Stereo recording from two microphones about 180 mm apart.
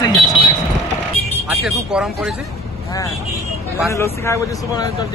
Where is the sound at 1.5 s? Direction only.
Centre (ahead or behind).